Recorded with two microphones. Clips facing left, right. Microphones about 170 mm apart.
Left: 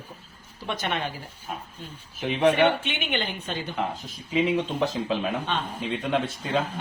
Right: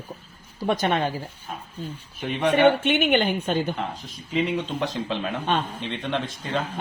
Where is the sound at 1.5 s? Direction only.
5° left (ahead or behind).